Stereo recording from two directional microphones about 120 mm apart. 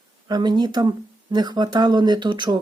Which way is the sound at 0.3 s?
35° right (ahead or behind).